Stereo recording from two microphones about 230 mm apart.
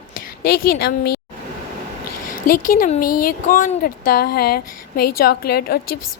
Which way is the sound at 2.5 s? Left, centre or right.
Left.